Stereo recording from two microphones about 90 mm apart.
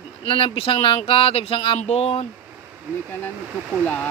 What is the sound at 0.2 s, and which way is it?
Speech, 90° left.